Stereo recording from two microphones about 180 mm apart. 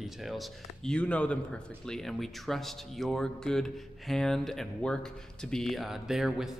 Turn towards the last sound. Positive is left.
turn(degrees=0)  # may be behind; listen again after turning